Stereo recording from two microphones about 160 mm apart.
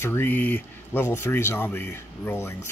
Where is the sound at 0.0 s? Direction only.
15° left (ahead or behind).